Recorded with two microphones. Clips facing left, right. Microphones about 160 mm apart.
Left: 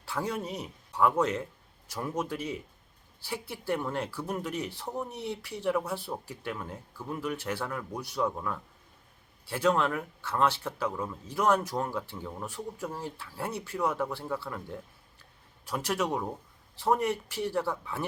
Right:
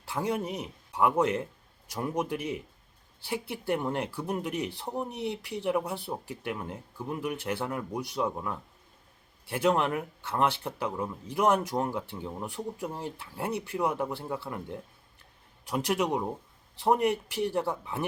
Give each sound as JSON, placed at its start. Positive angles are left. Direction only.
{"t": 0.0, "sound": "speech", "side_deg": -20}